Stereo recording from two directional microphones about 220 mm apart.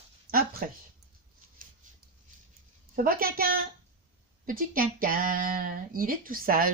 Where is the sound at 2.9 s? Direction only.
40° right (ahead or behind).